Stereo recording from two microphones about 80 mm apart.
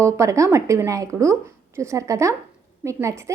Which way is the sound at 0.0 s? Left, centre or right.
Right.